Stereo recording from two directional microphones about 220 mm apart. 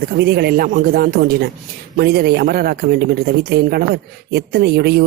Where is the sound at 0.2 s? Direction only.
45° right (ahead or behind).